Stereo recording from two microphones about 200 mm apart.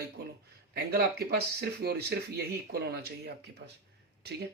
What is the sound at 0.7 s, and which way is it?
A man's voice, 50° right (ahead or behind).